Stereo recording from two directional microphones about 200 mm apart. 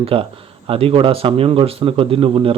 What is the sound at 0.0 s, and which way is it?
Speech, 25° right (ahead or behind).